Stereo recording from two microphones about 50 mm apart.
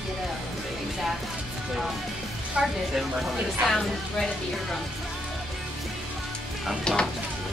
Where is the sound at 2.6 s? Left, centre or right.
Centre.